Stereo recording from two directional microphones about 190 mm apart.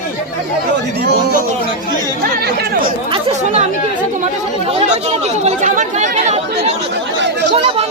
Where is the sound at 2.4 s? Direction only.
60° right (ahead or behind).